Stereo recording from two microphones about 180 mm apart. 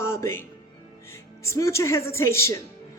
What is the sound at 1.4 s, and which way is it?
A man's voice, 15° left (ahead or behind).